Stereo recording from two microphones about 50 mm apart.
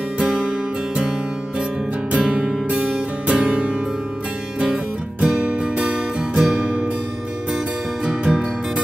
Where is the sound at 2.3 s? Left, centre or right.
Right.